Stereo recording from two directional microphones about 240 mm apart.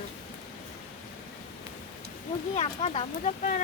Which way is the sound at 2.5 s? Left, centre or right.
Left.